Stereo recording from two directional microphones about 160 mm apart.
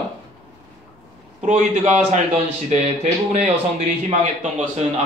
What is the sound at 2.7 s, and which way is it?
Speech, 45° right (ahead or behind).